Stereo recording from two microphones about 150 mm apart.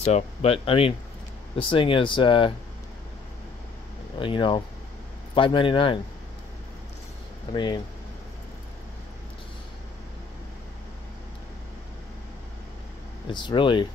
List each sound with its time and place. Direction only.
0.0 s speech: 45° left (ahead or behind)
4.2 s speech: 35° left (ahead or behind)
7.5 s speech: 30° left (ahead or behind)
13.3 s speech: 30° left (ahead or behind)